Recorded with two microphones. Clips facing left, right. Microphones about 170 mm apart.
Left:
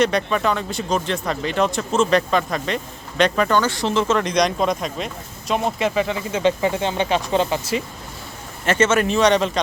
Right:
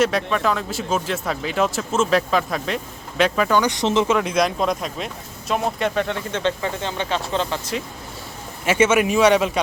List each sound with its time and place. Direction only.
0.0 s speech: centre (ahead or behind)
3.6 s speech: 20° right (ahead or behind); by 6.4 s 5° left (ahead or behind)
6.4 s speech: 15° left (ahead or behind)
8.6 s speech: 10° right (ahead or behind)